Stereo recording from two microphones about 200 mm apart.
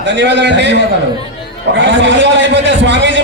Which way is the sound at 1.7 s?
65° right (ahead or behind).